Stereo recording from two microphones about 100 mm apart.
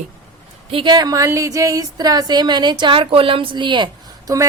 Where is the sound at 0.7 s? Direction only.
60° right (ahead or behind).